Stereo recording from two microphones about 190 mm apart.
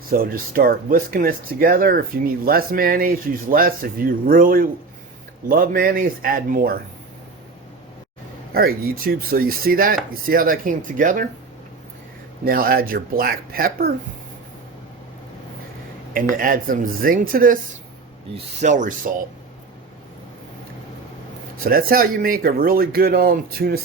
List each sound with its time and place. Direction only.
0.1 s speech: 50° right (ahead or behind)
8.5 s speech: 55° right (ahead or behind)
12.5 s speech: 50° right (ahead or behind)
16.3 s speech: 45° right (ahead or behind)
18.6 s speech: 40° right (ahead or behind)
21.6 s speech: 50° right (ahead or behind)